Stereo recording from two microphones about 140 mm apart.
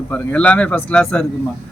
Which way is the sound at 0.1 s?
10° left (ahead or behind).